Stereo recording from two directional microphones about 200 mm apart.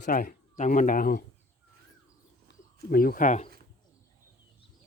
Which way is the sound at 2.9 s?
50° left (ahead or behind).